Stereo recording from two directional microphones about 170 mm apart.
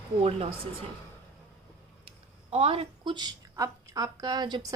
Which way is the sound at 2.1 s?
35° right (ahead or behind).